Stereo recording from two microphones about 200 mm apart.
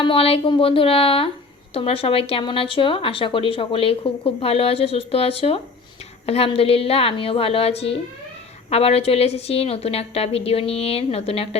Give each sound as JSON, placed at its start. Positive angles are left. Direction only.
{"t": 0.0, "sound": "speech", "side_deg": 25}